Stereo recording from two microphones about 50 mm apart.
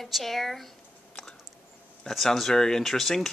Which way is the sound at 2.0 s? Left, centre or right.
Centre.